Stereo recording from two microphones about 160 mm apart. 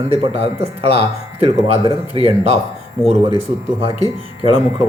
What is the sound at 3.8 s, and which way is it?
Speech, 35° right (ahead or behind).